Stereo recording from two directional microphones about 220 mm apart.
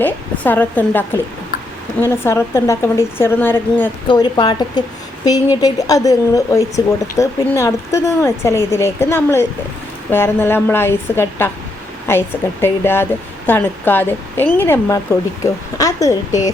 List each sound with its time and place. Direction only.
0.0 s speech: 10° left (ahead or behind)
4.1 s a woman's voice: 20° left (ahead or behind)
12.6 s speech: 10° left (ahead or behind)